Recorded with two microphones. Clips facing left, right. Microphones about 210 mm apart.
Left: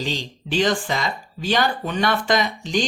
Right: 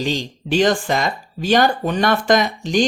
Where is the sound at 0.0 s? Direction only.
45° right (ahead or behind).